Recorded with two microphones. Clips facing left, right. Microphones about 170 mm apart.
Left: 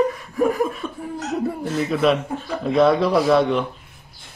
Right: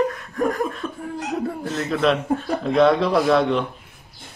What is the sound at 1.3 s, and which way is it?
Speech, centre (ahead or behind).